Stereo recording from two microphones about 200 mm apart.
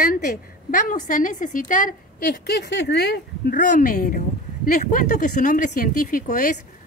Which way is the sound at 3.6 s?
40° left (ahead or behind).